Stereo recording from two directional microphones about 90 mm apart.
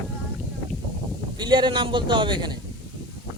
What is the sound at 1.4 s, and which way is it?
A man's voice, 60° right (ahead or behind).